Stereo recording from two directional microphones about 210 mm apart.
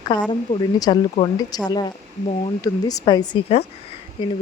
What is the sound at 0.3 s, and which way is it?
Speech, 20° left (ahead or behind).